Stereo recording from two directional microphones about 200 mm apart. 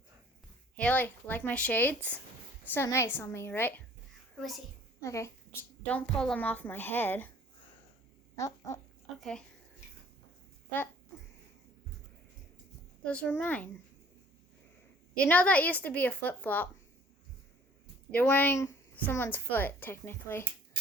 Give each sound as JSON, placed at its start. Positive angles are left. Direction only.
{"t": 0.8, "sound": "a woman's voice", "side_deg": 10}
{"t": 4.9, "sound": "a child's voice", "side_deg": 15}
{"t": 8.4, "sound": "a woman's voice", "side_deg": 15}
{"t": 13.1, "sound": "a woman's voice", "side_deg": 5}
{"t": 15.2, "sound": "a woman's voice", "side_deg": 5}
{"t": 18.1, "sound": "a woman's voice", "side_deg": 10}